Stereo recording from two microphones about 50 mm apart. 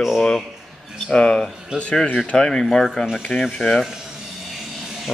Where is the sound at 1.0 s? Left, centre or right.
Centre.